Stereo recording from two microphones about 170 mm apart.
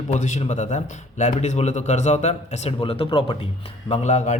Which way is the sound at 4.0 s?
40° left (ahead or behind).